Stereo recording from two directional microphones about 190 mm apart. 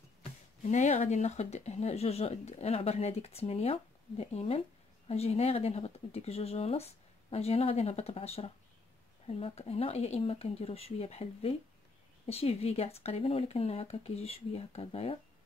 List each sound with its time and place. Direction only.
0.6 s speech: 40° left (ahead or behind)